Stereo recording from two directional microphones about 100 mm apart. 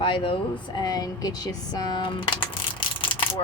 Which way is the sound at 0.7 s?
40° left (ahead or behind).